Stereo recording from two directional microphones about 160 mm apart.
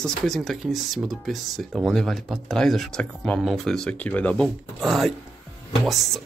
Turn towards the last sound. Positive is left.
turn(degrees=0)  # may be behind; listen again after turning